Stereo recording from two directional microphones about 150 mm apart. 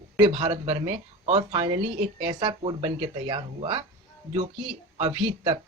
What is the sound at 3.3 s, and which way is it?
Speech, 35° right (ahead or behind).